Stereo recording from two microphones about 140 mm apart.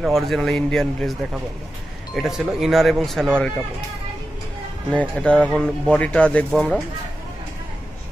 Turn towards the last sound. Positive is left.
turn(degrees=5)  # may be behind; listen again after turning